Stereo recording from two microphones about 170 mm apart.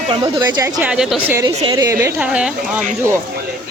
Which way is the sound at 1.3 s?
20° right (ahead or behind).